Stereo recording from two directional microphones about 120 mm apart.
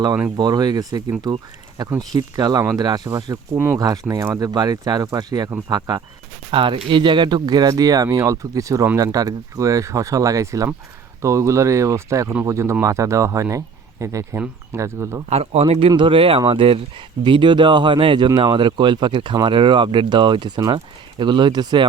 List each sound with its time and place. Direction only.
0.3 s speech: 35° right (ahead or behind)
6.5 s speech: 45° right (ahead or behind); by 15.2 s 25° right (ahead or behind)
15.3 s speech: 60° right (ahead or behind)
15.9 s speech: 45° right (ahead or behind)